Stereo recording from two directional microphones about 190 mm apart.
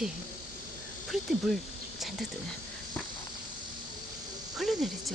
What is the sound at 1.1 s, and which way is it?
Cricket, centre (ahead or behind).